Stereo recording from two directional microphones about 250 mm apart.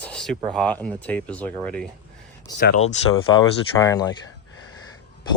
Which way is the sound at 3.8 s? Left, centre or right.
Centre.